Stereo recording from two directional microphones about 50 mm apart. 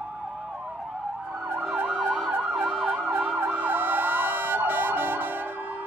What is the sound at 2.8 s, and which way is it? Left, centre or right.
Emergency vehicle, right.